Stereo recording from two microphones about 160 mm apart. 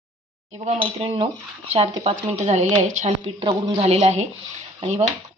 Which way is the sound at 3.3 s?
35° right (ahead or behind).